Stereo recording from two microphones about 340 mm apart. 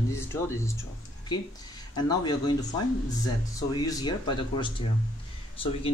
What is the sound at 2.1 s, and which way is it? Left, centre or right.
Speech, centre.